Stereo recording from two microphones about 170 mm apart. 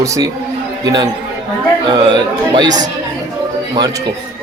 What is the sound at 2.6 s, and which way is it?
Speech, 20° right (ahead or behind).